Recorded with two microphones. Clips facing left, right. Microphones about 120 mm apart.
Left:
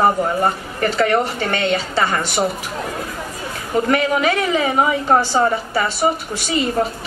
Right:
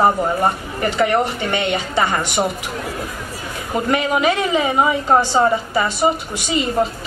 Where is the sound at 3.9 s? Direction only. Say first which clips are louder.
Right 1 dB; 20° right (ahead or behind).